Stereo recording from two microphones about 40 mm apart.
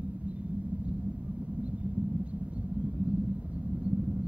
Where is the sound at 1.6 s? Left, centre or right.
Right.